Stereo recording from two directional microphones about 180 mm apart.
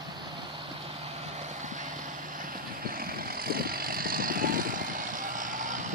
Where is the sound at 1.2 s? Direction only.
40° right (ahead or behind).